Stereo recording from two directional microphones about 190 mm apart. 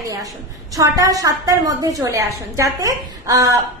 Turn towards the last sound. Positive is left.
turn(degrees=-20)  # may be behind; listen again after turning